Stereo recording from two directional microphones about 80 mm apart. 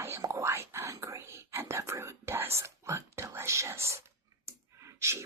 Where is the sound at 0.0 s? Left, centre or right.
Right.